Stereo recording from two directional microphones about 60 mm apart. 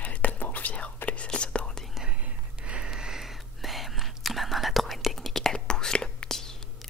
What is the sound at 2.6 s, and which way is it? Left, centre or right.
Whispering, centre.